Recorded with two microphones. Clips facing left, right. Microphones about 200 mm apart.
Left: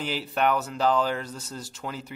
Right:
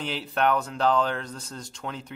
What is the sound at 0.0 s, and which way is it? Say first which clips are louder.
Speech: even; 5° left (ahead or behind).